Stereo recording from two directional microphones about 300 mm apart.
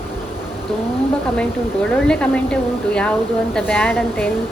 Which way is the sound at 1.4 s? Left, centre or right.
Centre.